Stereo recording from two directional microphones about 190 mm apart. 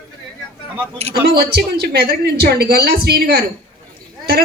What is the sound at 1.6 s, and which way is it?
A woman's voice, 60° right (ahead or behind).